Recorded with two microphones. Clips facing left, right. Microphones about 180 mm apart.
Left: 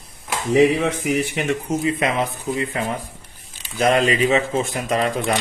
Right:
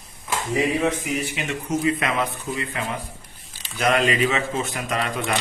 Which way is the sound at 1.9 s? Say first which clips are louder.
Left 3 dB; 30° left (ahead or behind).